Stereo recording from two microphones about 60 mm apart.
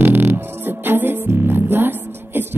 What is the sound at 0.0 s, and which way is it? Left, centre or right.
Music, right.